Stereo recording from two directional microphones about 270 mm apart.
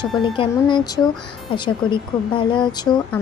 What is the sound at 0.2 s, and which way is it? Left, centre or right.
A woman's voice, centre.